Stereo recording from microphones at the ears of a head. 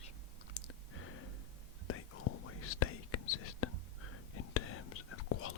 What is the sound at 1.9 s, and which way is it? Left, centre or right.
Whispering, left.